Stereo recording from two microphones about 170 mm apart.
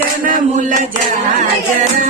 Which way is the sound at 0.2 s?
55° right (ahead or behind).